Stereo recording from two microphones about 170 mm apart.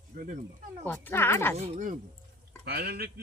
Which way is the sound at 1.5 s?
40° right (ahead or behind).